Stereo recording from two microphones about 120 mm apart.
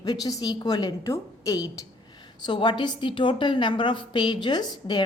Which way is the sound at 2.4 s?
40° left (ahead or behind).